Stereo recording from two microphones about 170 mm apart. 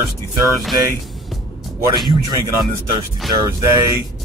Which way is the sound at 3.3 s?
20° right (ahead or behind).